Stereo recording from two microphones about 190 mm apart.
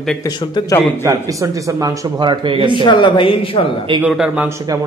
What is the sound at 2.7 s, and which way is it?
Speech, 25° left (ahead or behind).